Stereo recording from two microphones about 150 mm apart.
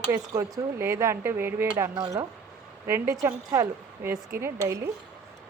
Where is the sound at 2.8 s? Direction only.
15° right (ahead or behind).